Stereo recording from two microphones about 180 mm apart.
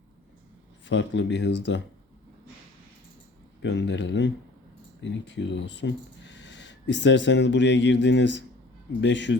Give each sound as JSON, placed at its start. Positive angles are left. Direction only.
{"t": 0.9, "sound": "speech", "side_deg": 90}
{"t": 3.6, "sound": "speech", "side_deg": 75}